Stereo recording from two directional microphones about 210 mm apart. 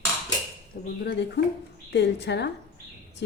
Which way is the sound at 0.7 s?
45° left (ahead or behind).